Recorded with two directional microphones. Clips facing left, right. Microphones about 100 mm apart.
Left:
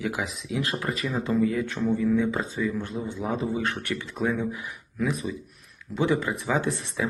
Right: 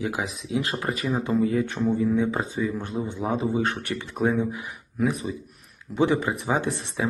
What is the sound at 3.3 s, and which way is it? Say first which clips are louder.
Speech: right 5 dB; 35° right (ahead or behind).